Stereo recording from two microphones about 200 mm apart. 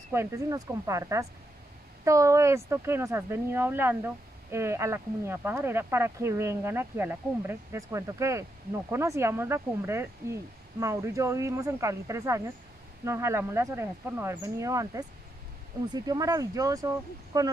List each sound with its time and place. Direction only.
0.1 s speech: 15° right (ahead or behind)